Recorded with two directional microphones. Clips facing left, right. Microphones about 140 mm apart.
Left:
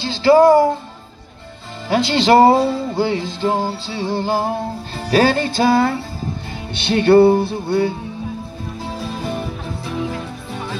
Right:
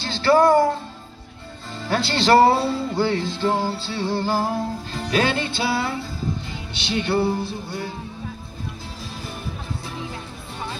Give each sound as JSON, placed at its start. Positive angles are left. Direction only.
{"t": 0.0, "sound": "music", "side_deg": 15}
{"t": 1.9, "sound": "music", "side_deg": 20}
{"t": 6.7, "sound": "music", "side_deg": 60}